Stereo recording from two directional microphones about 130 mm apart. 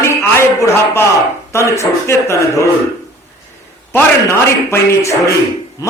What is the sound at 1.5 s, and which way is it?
Speech, 20° left (ahead or behind).